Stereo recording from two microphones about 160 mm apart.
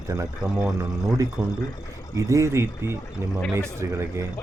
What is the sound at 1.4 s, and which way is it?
Speech, 5° right (ahead or behind).